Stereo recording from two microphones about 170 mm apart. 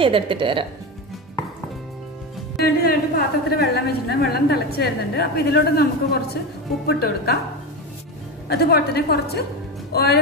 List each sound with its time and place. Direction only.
0.0 s speech: 30° right (ahead or behind)
2.6 s a woman's voice: 60° left (ahead or behind)
8.5 s a woman's voice: 65° left (ahead or behind)